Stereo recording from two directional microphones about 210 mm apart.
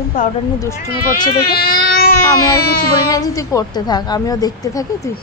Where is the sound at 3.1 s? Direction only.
15° left (ahead or behind).